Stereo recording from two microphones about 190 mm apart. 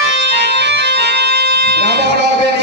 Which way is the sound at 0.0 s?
65° right (ahead or behind).